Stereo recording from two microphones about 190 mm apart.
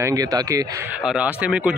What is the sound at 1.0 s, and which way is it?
Speech, 5° right (ahead or behind).